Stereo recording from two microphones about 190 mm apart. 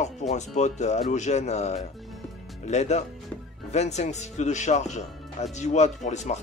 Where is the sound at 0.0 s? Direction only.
35° left (ahead or behind).